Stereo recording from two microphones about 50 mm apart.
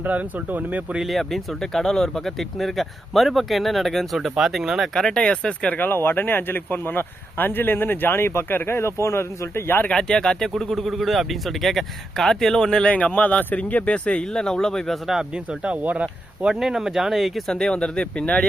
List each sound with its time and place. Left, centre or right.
0.0 s speech: right
1.0 s speech: centre
4.9 s speech: centre
5.7 s speech: left
9.9 s speech: centre
15.0 s speech: centre
15.6 s speech: right
16.5 s speech: centre
17.5 s speech: centre